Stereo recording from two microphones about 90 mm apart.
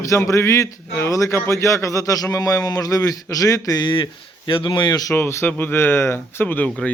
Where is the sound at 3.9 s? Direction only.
70° left (ahead or behind); by 5.1 s 50° left (ahead or behind).